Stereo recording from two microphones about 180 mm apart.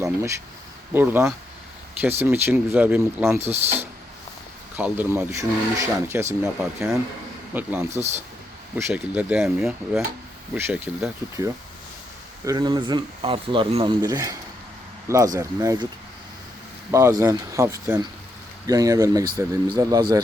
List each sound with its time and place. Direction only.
0.0 s speech: 15° right (ahead or behind)
4.8 s speech: 10° right (ahead or behind)
6.6 s speech: centre (ahead or behind)
12.5 s speech: 20° right (ahead or behind)
16.9 s speech: 15° right (ahead or behind)